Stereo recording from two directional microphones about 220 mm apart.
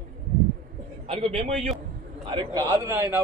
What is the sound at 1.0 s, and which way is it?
A man's voice, 25° right (ahead or behind).